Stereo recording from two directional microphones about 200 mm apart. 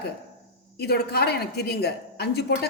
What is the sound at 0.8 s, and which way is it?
A woman's voice, 55° left (ahead or behind).